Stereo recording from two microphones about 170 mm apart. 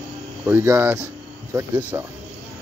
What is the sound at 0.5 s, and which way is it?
Speech, 15° right (ahead or behind).